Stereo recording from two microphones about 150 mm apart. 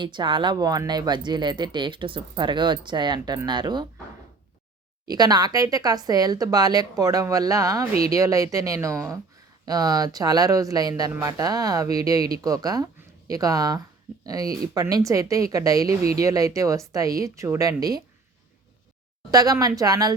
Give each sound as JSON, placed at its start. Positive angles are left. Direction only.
{"t": 0.0, "sound": "speech", "side_deg": -30}
{"t": 5.0, "sound": "speech", "side_deg": -25}
{"t": 19.3, "sound": "speech", "side_deg": -25}